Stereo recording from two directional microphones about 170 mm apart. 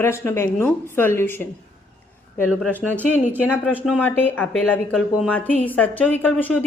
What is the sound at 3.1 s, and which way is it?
Speech, 10° right (ahead or behind).